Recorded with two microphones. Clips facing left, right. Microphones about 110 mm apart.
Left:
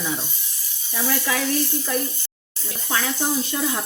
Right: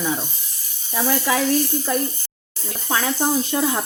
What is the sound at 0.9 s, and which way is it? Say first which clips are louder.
Speech: right 4 dB; 35° right (ahead or behind).